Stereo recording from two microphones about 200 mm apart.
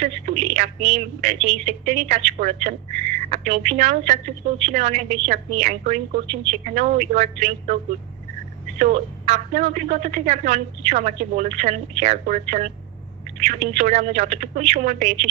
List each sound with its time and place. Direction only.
0.0 s a woman's voice: 35° right (ahead or behind)
8.7 s a woman's voice: 35° right (ahead or behind)